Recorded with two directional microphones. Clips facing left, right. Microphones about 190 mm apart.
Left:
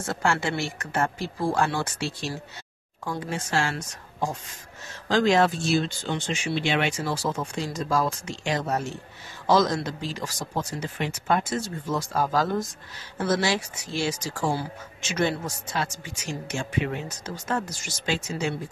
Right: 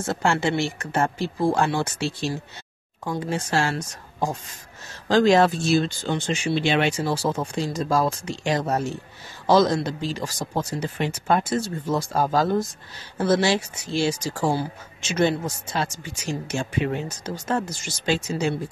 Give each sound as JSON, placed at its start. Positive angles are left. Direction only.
{"t": 0.0, "sound": "speech", "side_deg": -25}